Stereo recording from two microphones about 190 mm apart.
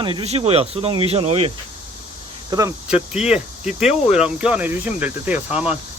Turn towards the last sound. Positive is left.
turn(degrees=-5)  # may be behind; listen again after turning